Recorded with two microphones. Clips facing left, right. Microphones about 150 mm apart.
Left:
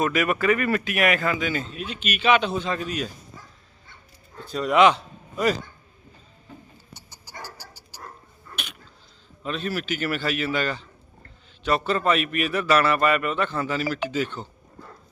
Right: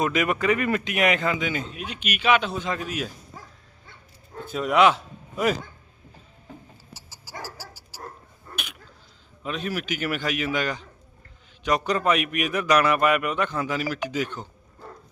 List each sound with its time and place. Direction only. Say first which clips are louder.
0.0 s speech: left 1 dB; 20° right (ahead or behind)
4.5 s a man's voice: left 1 dB; centre (ahead or behind)
7.3 s dog: right 3 dB; 90° right
7.7 s dog: right 2 dB; 10° right (ahead or behind)
9.4 s a man's voice: left 1 dB; 10° right (ahead or behind)